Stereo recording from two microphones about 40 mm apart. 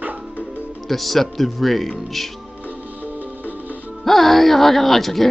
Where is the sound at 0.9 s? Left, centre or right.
Centre.